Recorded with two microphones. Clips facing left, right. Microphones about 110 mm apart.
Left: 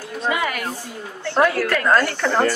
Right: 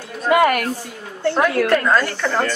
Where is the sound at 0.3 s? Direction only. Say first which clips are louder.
Right 9 dB; 55° right (ahead or behind).